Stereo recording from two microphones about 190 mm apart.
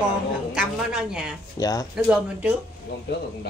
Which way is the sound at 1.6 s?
20° left (ahead or behind).